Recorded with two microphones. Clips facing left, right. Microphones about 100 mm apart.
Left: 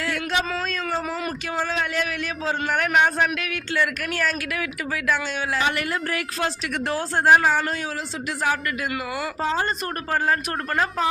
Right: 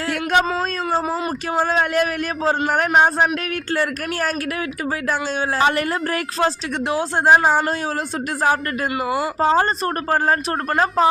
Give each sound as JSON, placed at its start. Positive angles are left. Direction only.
{"t": 0.1, "sound": "speech", "side_deg": -50}
{"t": 0.5, "sound": "a man's voice", "side_deg": -35}
{"t": 6.8, "sound": "speech", "side_deg": -20}
{"t": 7.3, "sound": "a man's voice", "side_deg": -30}
{"t": 9.0, "sound": "speech", "side_deg": -30}
{"t": 9.4, "sound": "a man's voice", "side_deg": -45}